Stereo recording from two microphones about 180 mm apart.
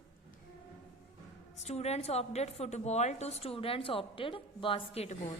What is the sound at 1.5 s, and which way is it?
A woman's voice, 40° left (ahead or behind).